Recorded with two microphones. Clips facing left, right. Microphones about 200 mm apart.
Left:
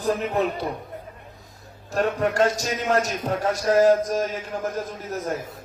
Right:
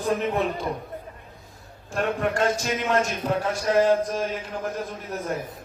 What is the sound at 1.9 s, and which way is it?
Speech, 40° left (ahead or behind).